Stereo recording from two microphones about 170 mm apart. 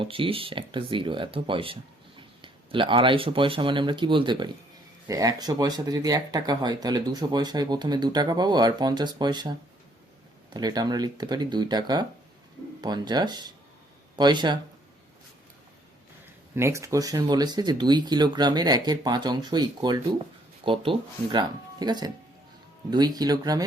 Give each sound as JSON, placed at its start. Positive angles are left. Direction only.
{"t": 0.0, "sound": "speech", "side_deg": -30}
{"t": 16.6, "sound": "speech", "side_deg": -15}